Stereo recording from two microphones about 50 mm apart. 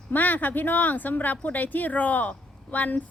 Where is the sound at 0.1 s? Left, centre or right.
Left.